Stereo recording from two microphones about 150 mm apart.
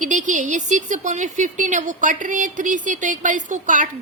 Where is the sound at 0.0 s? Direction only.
55° right (ahead or behind).